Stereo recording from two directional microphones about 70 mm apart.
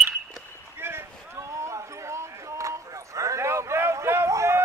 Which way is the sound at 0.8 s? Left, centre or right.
Right.